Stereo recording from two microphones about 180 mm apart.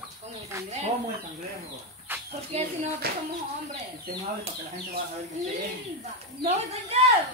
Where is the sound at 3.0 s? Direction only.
60° right (ahead or behind).